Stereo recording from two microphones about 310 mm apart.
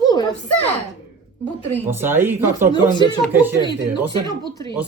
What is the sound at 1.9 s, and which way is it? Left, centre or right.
Speech, centre.